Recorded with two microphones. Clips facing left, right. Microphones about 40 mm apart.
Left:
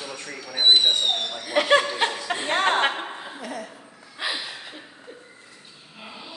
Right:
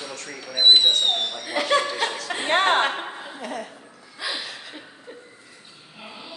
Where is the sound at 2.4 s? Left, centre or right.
Right.